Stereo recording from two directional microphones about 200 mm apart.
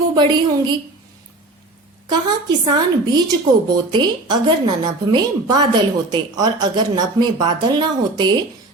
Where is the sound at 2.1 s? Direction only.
20° right (ahead or behind).